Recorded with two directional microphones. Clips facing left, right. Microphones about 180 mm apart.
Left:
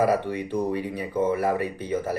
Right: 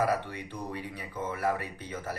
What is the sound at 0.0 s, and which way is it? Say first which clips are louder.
Speech: left 7 dB; 15° left (ahead or behind).